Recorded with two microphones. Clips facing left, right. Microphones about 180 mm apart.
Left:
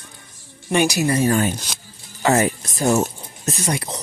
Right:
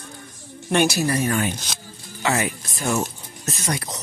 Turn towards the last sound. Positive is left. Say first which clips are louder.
# left 3 dB
turn(degrees=25)  # may be behind; listen again after turning